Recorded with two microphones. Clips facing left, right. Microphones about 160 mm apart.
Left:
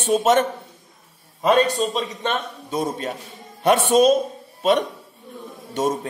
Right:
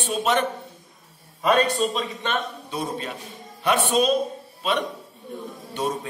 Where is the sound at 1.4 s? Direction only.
20° left (ahead or behind).